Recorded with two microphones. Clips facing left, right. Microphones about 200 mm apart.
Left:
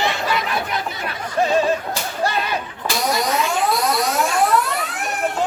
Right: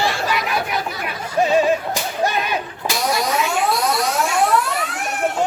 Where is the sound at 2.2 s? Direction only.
15° right (ahead or behind).